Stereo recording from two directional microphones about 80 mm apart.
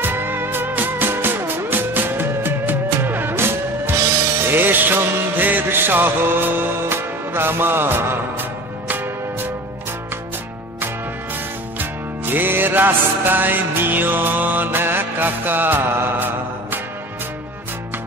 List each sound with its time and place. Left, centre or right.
0.0 s music: right
11.8 s music: right